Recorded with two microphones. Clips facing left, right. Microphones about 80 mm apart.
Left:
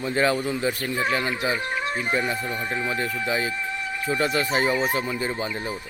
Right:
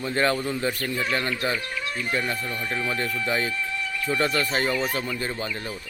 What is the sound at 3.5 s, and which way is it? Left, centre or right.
Music, left.